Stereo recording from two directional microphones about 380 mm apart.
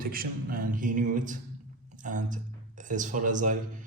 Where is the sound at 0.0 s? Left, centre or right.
Right.